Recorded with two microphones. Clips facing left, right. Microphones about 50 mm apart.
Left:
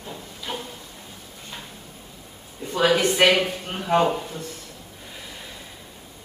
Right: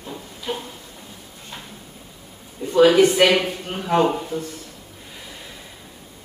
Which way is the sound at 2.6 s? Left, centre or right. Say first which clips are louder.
Right 6 dB; centre.